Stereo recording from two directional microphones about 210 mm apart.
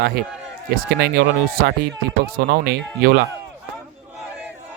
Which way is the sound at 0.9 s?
50° right (ahead or behind).